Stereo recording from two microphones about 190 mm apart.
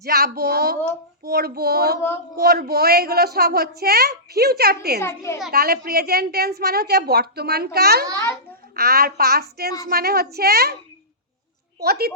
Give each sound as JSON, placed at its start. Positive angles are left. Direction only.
{"t": 0.0, "sound": "speech", "side_deg": -55}
{"t": 4.9, "sound": "a child's voice", "side_deg": 15}
{"t": 5.5, "sound": "speech", "side_deg": -55}
{"t": 11.8, "sound": "speech", "side_deg": -55}